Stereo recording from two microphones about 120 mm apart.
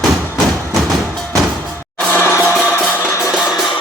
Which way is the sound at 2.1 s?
20° left (ahead or behind).